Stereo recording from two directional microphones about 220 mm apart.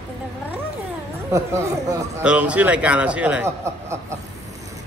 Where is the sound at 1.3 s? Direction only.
15° right (ahead or behind).